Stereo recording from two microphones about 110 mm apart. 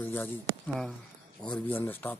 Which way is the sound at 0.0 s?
20° left (ahead or behind).